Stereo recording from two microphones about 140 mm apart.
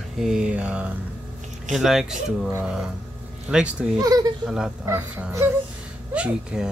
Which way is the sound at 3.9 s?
30° right (ahead or behind).